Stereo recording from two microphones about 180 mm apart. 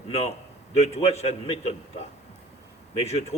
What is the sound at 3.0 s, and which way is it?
Speech, 35° left (ahead or behind).